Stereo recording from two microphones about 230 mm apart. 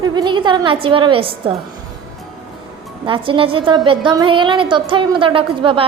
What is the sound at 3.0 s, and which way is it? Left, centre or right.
A woman's voice, right.